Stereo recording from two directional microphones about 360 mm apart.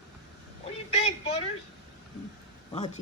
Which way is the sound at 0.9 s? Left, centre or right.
Centre.